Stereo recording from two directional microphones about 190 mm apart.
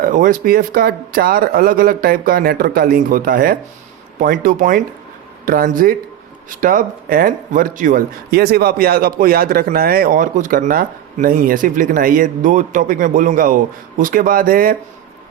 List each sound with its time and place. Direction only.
0.0 s a man's voice: 45° right (ahead or behind)